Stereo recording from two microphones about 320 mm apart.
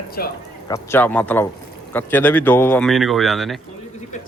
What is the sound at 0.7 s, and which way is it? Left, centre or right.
Speech, centre.